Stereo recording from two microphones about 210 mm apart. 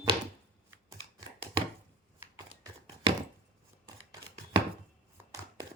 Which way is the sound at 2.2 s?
15° right (ahead or behind).